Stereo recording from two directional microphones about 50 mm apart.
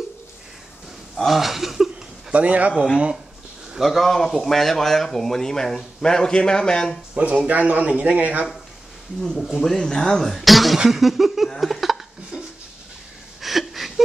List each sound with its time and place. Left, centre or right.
1.1 s speech: centre
2.3 s speech: right
3.8 s speech: centre
7.2 s speech: right
9.2 s speech: centre
10.9 s a sound: centre
13.4 s a sound: centre